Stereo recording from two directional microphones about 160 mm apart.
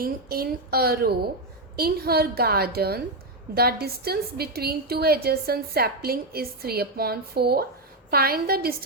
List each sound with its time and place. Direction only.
0.0 s a woman's voice: 70° right (ahead or behind)